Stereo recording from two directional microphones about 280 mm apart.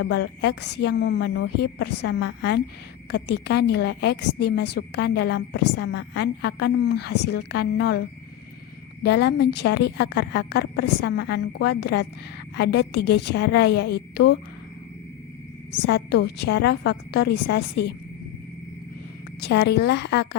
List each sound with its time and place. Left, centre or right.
0.0 s a woman's voice: left
9.0 s a woman's voice: left
16.5 s a woman's voice: left
19.4 s a woman's voice: left